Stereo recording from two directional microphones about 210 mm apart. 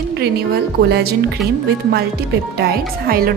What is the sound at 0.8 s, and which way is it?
A woman's voice, 50° right (ahead or behind).